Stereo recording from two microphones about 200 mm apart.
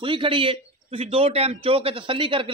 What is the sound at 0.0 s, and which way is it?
A man's voice, 25° right (ahead or behind).